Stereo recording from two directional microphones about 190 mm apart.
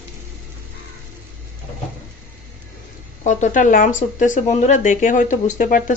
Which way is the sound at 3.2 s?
40° left (ahead or behind).